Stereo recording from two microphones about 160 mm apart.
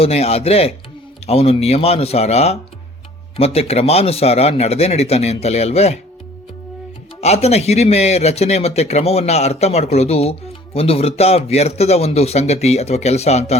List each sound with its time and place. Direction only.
0.0 s speech: 40° left (ahead or behind)
7.2 s speech: 40° left (ahead or behind)